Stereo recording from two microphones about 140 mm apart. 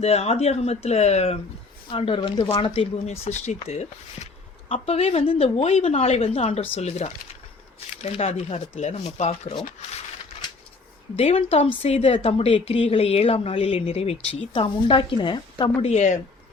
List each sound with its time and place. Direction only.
0.0 s a woman's voice: 50° left (ahead or behind)
1.9 s a woman's voice: 40° left (ahead or behind)
11.2 s a woman's voice: 45° left (ahead or behind)
15.8 s speech: 55° left (ahead or behind)